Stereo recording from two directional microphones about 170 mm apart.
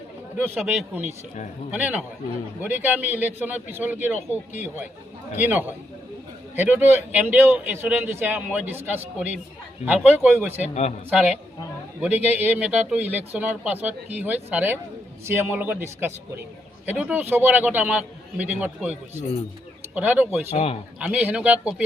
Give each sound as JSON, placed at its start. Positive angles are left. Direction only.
{"t": 0.6, "sound": "a man's voice", "side_deg": 0}
{"t": 6.6, "sound": "a man's voice", "side_deg": -10}
{"t": 10.6, "sound": "a man's voice", "side_deg": 40}
{"t": 11.1, "sound": "a man's voice", "side_deg": -10}
{"t": 20.5, "sound": "a man's voice", "side_deg": 40}
{"t": 21.0, "sound": "a man's voice", "side_deg": -10}